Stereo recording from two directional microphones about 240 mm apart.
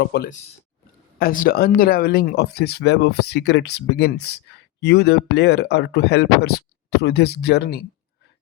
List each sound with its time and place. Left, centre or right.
0.0 s speech: left